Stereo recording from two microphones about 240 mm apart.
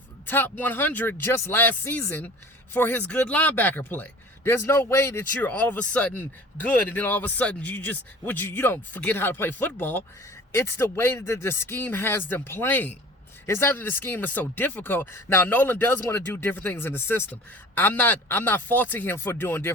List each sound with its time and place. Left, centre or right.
0.3 s speech: centre